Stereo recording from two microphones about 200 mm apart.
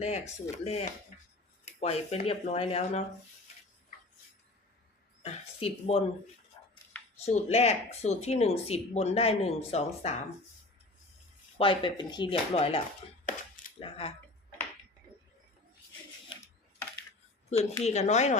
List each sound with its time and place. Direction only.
0.0 s speech: 35° left (ahead or behind)
1.1 s finger snapping: 40° left (ahead or behind)
1.6 s speech: 30° left (ahead or behind)
5.2 s speech: 30° left (ahead or behind)
6.6 s a sound: 20° left (ahead or behind)
7.3 s speech: 30° left (ahead or behind)
11.5 s speech: 25° left (ahead or behind)
17.8 s speech: 35° left (ahead or behind)